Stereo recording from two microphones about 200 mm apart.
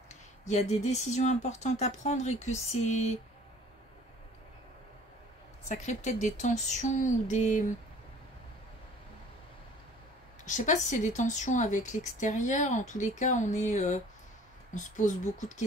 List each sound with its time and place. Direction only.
0.5 s speech: 35° left (ahead or behind)
5.7 s speech: 35° left (ahead or behind)
10.4 s speech: 40° left (ahead or behind)